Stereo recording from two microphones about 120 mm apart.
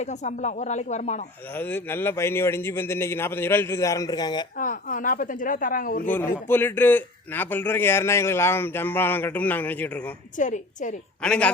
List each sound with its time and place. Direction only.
0.0 s speech: 75° left (ahead or behind)
1.5 s a man's voice: 15° left (ahead or behind); by 4.4 s 35° left (ahead or behind)
4.5 s a woman's voice: 90° left
6.1 s a man's voice: 15° left (ahead or behind)
10.3 s a woman's voice: 90° left
11.2 s a man's voice: 10° left (ahead or behind)